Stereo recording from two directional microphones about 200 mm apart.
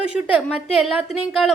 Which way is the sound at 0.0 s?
5° right (ahead or behind).